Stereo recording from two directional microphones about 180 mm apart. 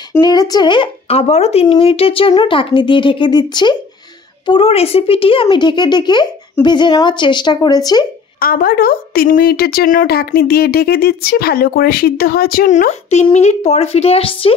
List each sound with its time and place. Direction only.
0.2 s speech: 20° left (ahead or behind)
8.4 s a woman's voice: 55° left (ahead or behind); by 14.5 s 30° left (ahead or behind)